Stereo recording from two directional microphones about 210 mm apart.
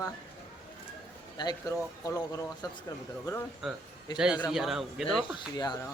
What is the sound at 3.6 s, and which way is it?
A man's voice, centre (ahead or behind).